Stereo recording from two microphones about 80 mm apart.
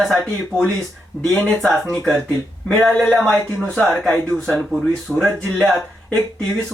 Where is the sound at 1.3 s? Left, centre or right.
Centre.